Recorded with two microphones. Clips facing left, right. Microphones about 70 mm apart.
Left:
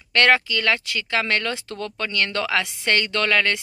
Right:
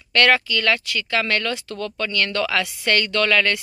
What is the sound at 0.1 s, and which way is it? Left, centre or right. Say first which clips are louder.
Speech: even; left.